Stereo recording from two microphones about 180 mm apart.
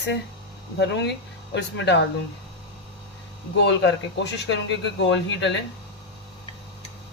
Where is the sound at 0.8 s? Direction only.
75° left (ahead or behind).